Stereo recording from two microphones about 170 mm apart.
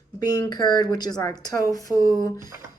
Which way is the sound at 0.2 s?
25° left (ahead or behind).